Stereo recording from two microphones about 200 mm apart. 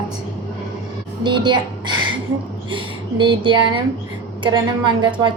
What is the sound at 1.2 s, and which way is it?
A woman's voice, 25° right (ahead or behind).